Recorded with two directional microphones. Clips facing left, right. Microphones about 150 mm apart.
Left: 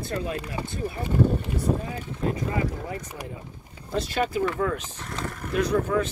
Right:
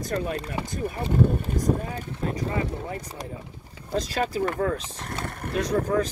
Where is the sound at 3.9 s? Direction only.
35° right (ahead or behind).